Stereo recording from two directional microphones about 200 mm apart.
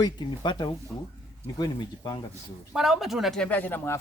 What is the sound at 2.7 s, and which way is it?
Speech, centre (ahead or behind).